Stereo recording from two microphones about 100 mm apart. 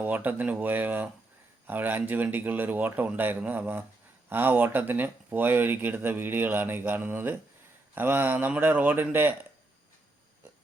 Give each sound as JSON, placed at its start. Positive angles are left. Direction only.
{"t": 0.0, "sound": "speech", "side_deg": -20}